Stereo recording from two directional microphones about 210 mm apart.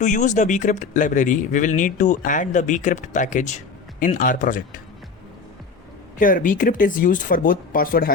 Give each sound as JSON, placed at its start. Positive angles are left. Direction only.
{"t": 0.0, "sound": "speech", "side_deg": 35}
{"t": 6.1, "sound": "speech", "side_deg": 40}